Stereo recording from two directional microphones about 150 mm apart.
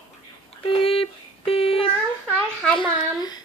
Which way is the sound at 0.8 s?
40° left (ahead or behind).